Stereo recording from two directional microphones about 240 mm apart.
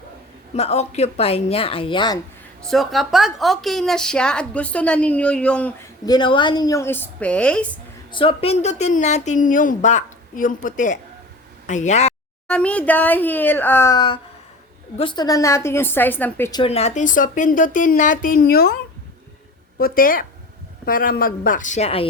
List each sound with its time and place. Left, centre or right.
0.5 s a woman's voice: left
2.6 s a woman's voice: centre
6.1 s a woman's voice: centre
8.1 s a woman's voice: left
12.5 s a woman's voice: centre; by 18.8 s left
19.8 s a woman's voice: left